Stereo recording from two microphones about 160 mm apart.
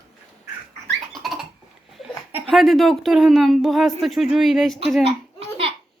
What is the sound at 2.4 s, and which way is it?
Speech, centre (ahead or behind).